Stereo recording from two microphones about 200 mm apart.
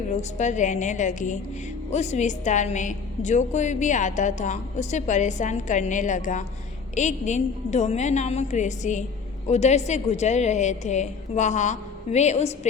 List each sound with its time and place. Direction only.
0.2 s a woman's voice: 35° left (ahead or behind)